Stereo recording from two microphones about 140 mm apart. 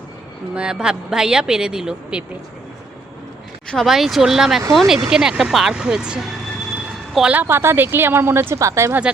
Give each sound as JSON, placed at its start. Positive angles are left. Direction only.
{"t": 0.5, "sound": "speech", "side_deg": -5}
{"t": 3.7, "sound": "a woman's voice", "side_deg": 0}